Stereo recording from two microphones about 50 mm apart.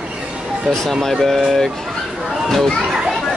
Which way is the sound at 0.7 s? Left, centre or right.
Centre.